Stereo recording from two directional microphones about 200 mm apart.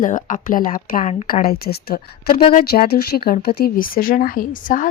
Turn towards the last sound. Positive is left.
turn(degrees=40)  # may be behind; listen again after turning